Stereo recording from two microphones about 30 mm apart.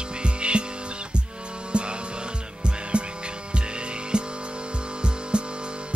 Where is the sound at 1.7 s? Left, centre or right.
Right.